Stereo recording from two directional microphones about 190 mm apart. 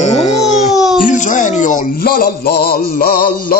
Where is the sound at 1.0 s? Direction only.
40° left (ahead or behind).